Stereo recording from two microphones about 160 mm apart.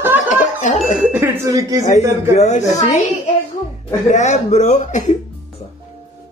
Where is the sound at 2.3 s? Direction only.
45° left (ahead or behind).